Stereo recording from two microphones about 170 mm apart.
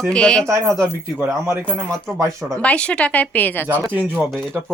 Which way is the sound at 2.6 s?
5° left (ahead or behind).